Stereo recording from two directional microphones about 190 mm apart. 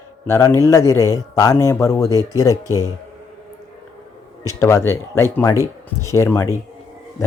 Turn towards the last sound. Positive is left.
turn(degrees=15)  # may be behind; listen again after turning